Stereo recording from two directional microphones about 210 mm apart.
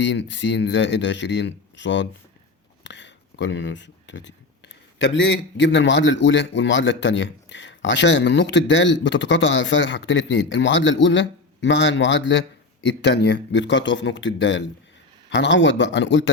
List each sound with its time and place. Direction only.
0.0 s a man's voice: 60° left (ahead or behind)
2.8 s a sound: 60° left (ahead or behind)
4.9 s a man's voice: 60° left (ahead or behind)